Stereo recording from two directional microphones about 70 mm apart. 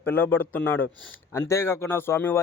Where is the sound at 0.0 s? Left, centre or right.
Left.